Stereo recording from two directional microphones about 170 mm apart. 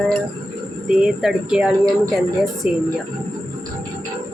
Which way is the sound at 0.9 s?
5° right (ahead or behind).